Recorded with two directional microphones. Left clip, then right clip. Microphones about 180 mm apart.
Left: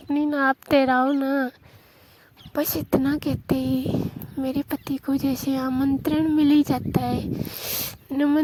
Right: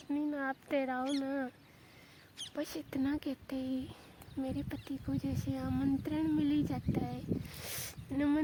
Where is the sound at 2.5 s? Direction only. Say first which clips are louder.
Left 17 dB; 45° left (ahead or behind).